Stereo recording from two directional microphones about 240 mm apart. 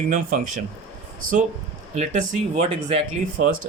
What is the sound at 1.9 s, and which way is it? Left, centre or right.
Speech, right.